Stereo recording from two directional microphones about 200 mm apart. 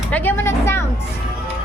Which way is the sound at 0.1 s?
10° left (ahead or behind).